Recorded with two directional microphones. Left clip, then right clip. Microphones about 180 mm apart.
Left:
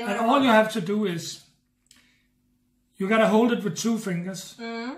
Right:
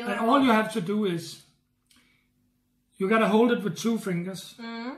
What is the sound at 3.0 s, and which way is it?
Speech, 30° left (ahead or behind).